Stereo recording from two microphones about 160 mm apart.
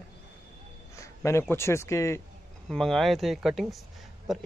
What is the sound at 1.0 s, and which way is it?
Speech, 15° left (ahead or behind).